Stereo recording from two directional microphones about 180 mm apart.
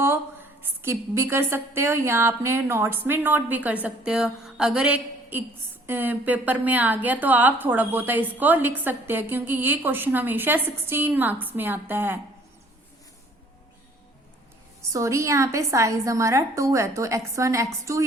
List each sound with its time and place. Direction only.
0.8 s a woman's voice: 15° right (ahead or behind)
14.8 s a woman's voice: 15° right (ahead or behind)